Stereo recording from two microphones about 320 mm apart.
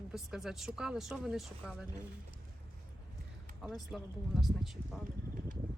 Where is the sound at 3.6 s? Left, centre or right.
Centre.